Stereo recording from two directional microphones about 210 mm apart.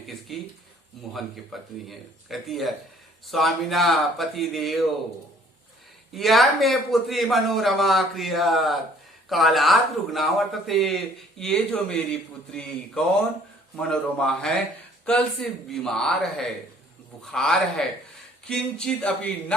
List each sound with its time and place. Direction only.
0.3 s a man's voice: centre (ahead or behind)
6.1 s a man's voice: centre (ahead or behind)